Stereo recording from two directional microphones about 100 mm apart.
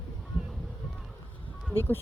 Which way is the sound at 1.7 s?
20° left (ahead or behind).